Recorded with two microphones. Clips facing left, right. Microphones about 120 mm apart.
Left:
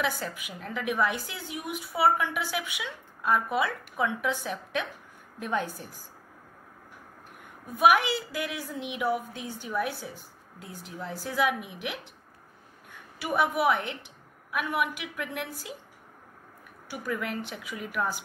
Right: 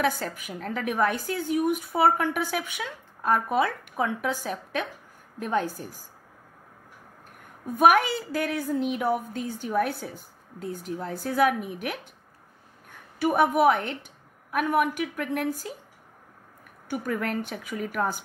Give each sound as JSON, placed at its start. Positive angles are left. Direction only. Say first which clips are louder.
{"t": 0.2, "sound": "a woman's voice", "louder": "right 3 dB", "side_deg": -45}
{"t": 7.8, "sound": "a woman's voice", "louder": "right 2 dB", "side_deg": -45}
{"t": 13.2, "sound": "a woman's voice", "louder": "right 5 dB", "side_deg": -45}
{"t": 16.8, "sound": "a woman's voice", "louder": "right 4 dB", "side_deg": -50}